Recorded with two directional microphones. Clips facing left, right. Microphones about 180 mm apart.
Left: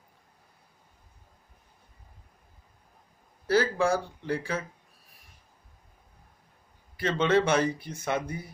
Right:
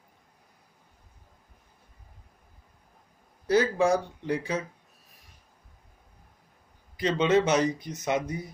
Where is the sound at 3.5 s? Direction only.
20° right (ahead or behind).